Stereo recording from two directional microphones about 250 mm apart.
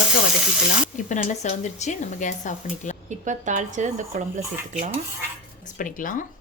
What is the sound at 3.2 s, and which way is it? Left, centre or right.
Speech, right.